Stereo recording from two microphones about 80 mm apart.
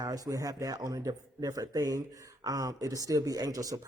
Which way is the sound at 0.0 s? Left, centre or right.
Right.